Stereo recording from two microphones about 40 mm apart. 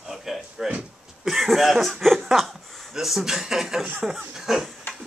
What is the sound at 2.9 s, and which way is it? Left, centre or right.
Speech, centre.